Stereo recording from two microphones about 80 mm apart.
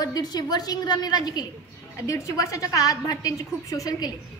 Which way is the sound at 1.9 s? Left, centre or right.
Left.